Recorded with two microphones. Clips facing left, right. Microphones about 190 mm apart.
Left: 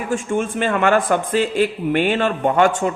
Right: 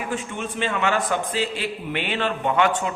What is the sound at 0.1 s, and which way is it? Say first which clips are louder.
A man's voice: left 8 dB; 50° left (ahead or behind).